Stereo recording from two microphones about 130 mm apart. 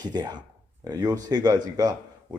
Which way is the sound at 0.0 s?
35° right (ahead or behind).